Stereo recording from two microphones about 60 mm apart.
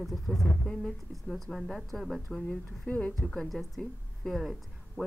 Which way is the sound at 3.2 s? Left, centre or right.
Centre.